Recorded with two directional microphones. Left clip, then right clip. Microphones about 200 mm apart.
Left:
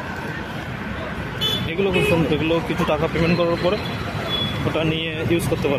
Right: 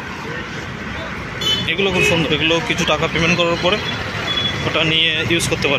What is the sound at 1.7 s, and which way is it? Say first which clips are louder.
Speech: right 3 dB; 5° left (ahead or behind).